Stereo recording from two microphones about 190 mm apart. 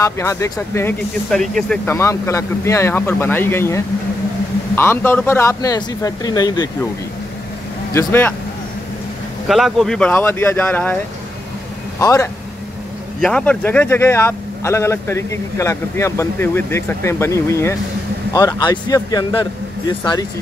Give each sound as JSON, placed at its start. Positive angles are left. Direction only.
{"t": 0.0, "sound": "speech", "side_deg": 15}
{"t": 2.0, "sound": "speech", "side_deg": 15}
{"t": 7.9, "sound": "speech", "side_deg": 10}
{"t": 9.5, "sound": "speech", "side_deg": 0}
{"t": 12.0, "sound": "speech", "side_deg": 15}
{"t": 13.2, "sound": "speech", "side_deg": 5}